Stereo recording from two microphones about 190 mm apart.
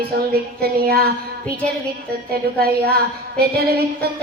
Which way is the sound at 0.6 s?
55° right (ahead or behind).